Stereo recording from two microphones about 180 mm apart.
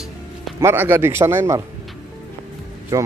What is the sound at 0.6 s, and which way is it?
Speech, 10° right (ahead or behind).